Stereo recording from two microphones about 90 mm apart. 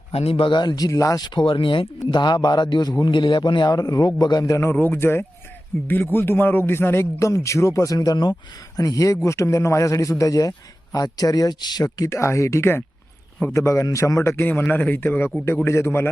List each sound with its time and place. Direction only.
0.3 s a man's voice: 80° left; by 1.3 s 40° left (ahead or behind)
1.3 s speech: 70° left (ahead or behind)
2.0 s a man's voice: 55° left (ahead or behind); by 4.7 s 40° left (ahead or behind)
4.7 s a man's voice: 20° left (ahead or behind)
7.9 s a man's voice: 50° left (ahead or behind)
12.0 s a man's voice: 30° left (ahead or behind)